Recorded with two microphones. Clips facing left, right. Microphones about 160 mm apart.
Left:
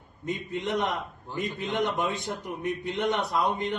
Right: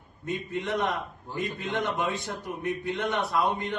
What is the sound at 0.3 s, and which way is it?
A man's voice, 20° left (ahead or behind).